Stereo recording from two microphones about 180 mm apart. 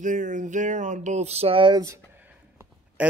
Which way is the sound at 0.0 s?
45° right (ahead or behind).